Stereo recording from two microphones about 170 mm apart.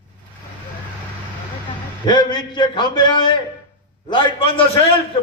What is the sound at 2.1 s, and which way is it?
A man's voice, 25° left (ahead or behind).